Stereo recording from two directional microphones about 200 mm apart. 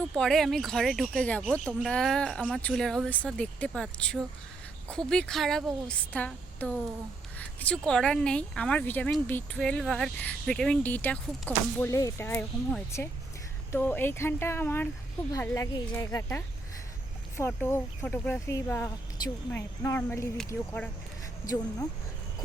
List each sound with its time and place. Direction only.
0.2 s speech: centre (ahead or behind)
21.4 s speech: 15° left (ahead or behind)